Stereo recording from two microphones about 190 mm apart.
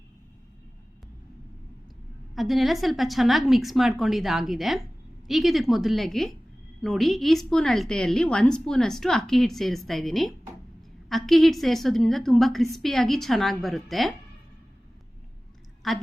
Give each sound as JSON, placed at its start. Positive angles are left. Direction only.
{"t": 2.3, "sound": "a woman's voice", "side_deg": 0}
{"t": 15.8, "sound": "a woman's voice", "side_deg": 0}